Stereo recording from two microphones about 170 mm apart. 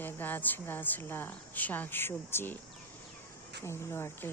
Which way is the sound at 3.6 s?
15° left (ahead or behind).